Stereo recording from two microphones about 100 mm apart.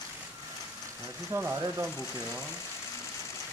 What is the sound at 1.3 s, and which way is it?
Speech, 20° right (ahead or behind).